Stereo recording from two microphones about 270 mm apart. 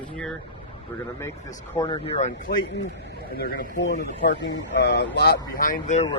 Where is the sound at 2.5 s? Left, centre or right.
Left.